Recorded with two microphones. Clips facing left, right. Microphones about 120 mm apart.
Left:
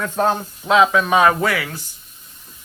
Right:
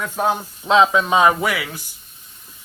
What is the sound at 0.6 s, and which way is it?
Speech, 25° right (ahead or behind).